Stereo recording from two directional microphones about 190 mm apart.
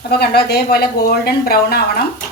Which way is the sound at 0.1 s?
55° left (ahead or behind).